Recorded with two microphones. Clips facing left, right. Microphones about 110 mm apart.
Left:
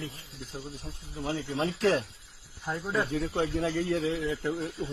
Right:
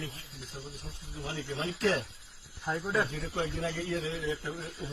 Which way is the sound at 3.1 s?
50° left (ahead or behind).